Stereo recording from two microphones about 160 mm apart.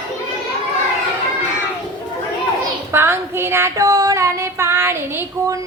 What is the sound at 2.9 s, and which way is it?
Female singing, 15° right (ahead or behind).